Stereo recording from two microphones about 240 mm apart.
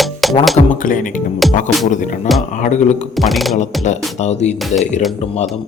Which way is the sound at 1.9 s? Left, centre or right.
Left.